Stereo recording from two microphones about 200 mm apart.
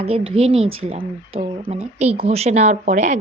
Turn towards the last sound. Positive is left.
turn(degrees=-35)  # may be behind; listen again after turning